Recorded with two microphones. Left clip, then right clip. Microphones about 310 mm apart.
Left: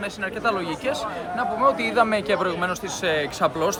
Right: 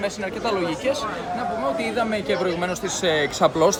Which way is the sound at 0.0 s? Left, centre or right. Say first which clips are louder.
Even; centre.